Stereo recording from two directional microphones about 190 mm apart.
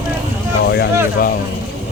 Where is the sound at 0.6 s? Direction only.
60° left (ahead or behind).